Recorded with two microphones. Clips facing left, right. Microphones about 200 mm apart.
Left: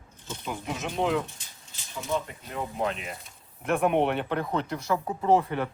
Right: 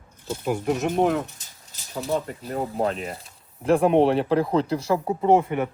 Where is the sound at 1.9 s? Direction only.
40° right (ahead or behind).